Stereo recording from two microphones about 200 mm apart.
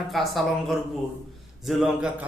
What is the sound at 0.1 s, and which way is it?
A man's voice, centre (ahead or behind).